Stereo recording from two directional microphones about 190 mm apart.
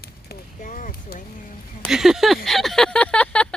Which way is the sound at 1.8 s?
Centre (ahead or behind).